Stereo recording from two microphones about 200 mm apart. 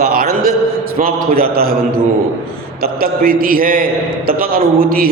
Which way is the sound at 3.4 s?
45° right (ahead or behind).